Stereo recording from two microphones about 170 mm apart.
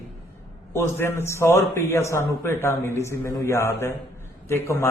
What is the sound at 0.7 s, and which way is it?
A man's voice, 15° left (ahead or behind).